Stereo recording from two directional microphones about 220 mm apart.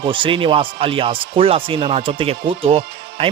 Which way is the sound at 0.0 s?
25° right (ahead or behind).